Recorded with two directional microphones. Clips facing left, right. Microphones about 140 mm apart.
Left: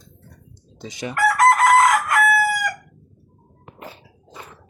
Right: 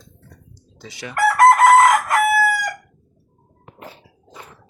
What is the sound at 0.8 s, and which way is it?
Chicken, 20° left (ahead or behind).